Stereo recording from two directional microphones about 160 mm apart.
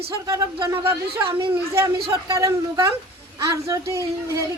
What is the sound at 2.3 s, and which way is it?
Speech, 20° right (ahead or behind).